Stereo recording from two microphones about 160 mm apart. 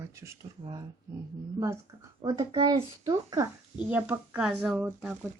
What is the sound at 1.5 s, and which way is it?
Speech, 20° right (ahead or behind).